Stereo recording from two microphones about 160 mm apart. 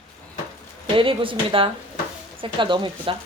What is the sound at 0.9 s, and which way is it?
Speech, 35° right (ahead or behind).